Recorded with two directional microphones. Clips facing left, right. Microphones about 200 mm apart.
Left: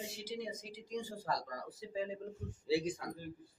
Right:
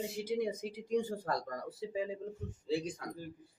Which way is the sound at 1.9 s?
15° right (ahead or behind).